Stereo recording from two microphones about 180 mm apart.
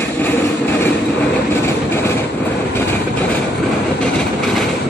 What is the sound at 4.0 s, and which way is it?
Vehicle, 5° left (ahead or behind).